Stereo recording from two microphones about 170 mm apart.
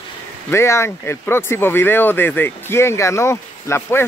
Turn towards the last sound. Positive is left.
turn(degrees=15)  # may be behind; listen again after turning